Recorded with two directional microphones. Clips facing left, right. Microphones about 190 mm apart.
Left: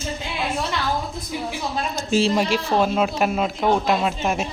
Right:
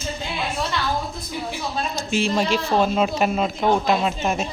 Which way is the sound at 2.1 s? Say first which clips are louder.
Left 4 dB; 35° left (ahead or behind).